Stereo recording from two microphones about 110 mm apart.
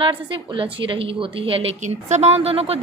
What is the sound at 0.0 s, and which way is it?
A woman's voice, 50° right (ahead or behind).